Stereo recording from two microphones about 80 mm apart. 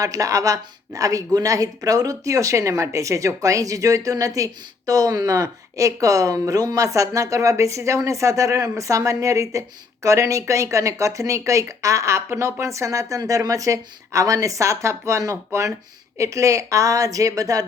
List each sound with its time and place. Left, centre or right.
0.0 s speech: right